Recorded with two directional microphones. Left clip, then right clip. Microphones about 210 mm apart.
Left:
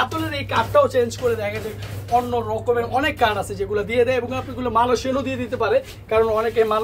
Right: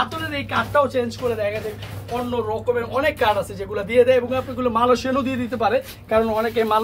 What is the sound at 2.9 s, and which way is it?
Speech, 15° left (ahead or behind).